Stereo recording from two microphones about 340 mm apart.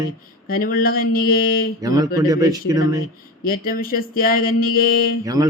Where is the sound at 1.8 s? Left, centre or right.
Centre.